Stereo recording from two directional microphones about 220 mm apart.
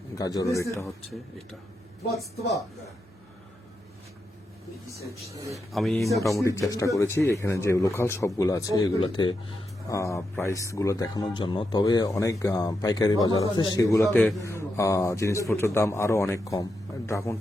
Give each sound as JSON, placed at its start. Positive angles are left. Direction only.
{"t": 0.2, "sound": "speech", "side_deg": 15}
{"t": 5.7, "sound": "speech", "side_deg": 0}
{"t": 6.3, "sound": "speech", "side_deg": 15}